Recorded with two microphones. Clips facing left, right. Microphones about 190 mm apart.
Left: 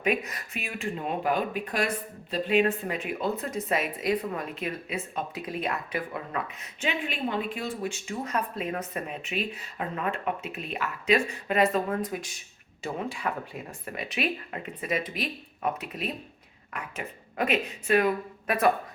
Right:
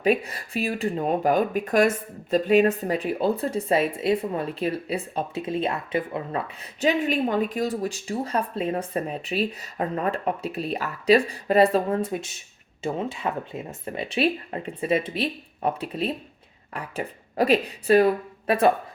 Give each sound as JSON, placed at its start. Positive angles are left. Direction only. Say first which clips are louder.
{"t": 0.0, "sound": "a woman's voice", "louder": "right 5 dB", "side_deg": -30}